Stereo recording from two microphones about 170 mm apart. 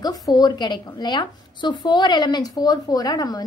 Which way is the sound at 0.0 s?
20° left (ahead or behind).